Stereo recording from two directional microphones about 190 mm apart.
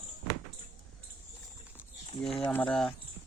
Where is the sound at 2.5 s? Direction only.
5° left (ahead or behind).